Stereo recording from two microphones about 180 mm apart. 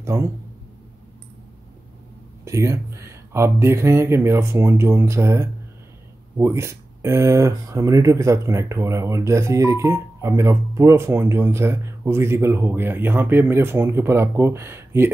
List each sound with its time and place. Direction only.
0.0 s speech: 15° right (ahead or behind)
2.4 s speech: 15° right (ahead or behind)